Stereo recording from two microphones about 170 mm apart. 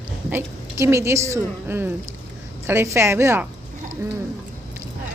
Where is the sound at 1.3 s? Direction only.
15° right (ahead or behind).